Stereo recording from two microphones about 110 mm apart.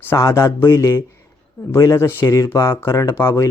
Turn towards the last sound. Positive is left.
turn(degrees=25)  # may be behind; listen again after turning